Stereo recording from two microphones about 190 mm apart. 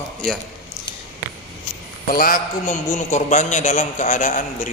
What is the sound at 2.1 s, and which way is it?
A man's voice, 45° left (ahead or behind).